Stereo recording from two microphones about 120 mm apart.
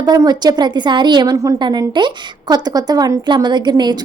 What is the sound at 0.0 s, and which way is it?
A woman's voice, 35° right (ahead or behind).